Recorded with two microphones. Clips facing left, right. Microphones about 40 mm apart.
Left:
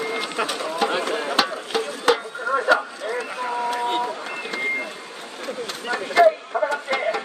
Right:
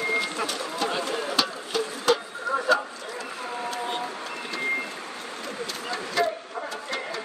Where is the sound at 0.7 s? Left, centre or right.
Left.